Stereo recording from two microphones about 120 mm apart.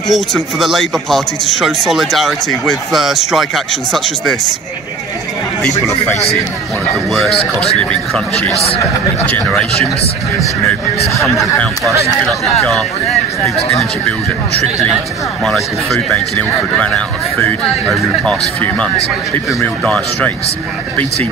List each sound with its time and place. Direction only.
0.1 s speech: centre (ahead or behind)
7.6 s speech: 5° left (ahead or behind)
8.5 s speech: 55° left (ahead or behind)
11.5 s a man's voice: 5° left (ahead or behind)
16.1 s a man's voice: 10° left (ahead or behind)